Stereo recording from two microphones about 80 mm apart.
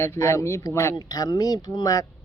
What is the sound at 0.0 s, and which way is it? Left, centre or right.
Speech, left.